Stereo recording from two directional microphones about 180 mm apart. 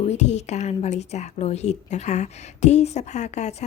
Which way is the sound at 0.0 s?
35° left (ahead or behind).